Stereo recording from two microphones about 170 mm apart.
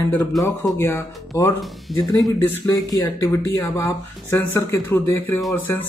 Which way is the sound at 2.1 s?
20° left (ahead or behind).